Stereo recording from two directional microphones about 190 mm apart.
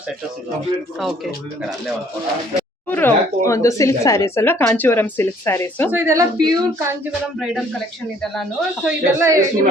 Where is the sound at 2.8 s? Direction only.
10° left (ahead or behind).